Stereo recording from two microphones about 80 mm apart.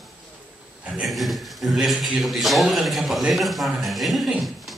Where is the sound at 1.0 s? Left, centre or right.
Centre.